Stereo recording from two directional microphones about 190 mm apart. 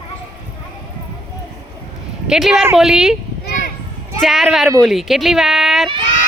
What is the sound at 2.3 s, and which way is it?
Speech, centre (ahead or behind).